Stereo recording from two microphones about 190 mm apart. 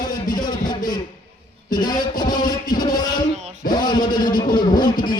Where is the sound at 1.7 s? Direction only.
20° left (ahead or behind).